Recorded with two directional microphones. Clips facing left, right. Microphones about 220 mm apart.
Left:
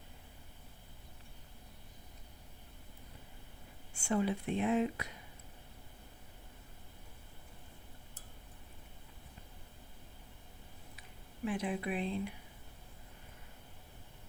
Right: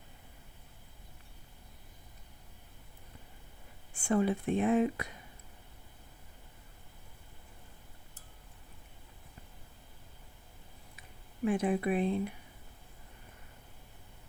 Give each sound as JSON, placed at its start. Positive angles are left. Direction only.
{"t": 3.9, "sound": "speech", "side_deg": -50}
{"t": 11.4, "sound": "speech", "side_deg": -50}